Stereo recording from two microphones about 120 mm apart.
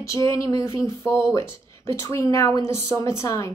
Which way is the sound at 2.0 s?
25° left (ahead or behind).